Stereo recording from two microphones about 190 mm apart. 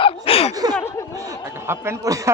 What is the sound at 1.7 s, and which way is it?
Speech, 15° right (ahead or behind).